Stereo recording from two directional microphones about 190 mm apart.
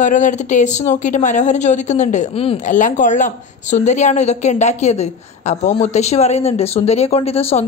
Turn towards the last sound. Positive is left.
turn(degrees=30)  # may be behind; listen again after turning